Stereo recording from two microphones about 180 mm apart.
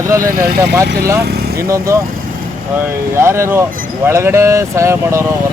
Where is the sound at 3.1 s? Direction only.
15° right (ahead or behind).